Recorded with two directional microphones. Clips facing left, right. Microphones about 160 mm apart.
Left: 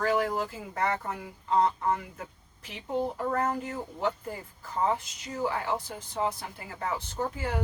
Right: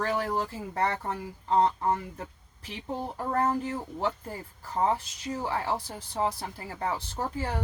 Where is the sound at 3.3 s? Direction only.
35° right (ahead or behind).